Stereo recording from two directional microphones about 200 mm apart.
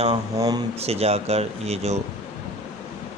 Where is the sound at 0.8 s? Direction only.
30° right (ahead or behind).